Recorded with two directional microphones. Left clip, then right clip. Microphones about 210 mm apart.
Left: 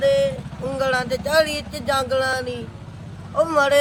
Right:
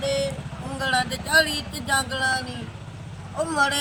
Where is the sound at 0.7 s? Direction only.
20° left (ahead or behind).